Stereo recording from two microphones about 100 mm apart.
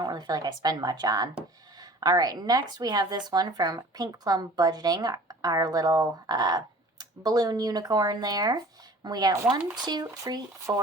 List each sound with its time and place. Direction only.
0.0 s speech: 45° right (ahead or behind)
10.7 s speech: 30° right (ahead or behind)